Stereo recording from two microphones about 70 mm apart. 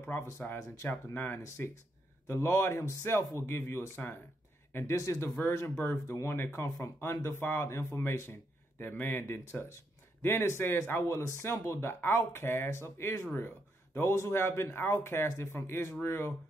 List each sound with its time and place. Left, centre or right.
0.0 s a man's voice: left
4.7 s speech: left
5.8 s a man's voice: left